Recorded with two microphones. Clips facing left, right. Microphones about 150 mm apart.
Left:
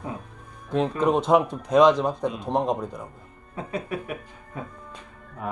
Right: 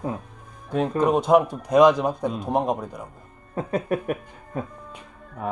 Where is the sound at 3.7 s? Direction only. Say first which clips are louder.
Right 6 dB; 50° right (ahead or behind).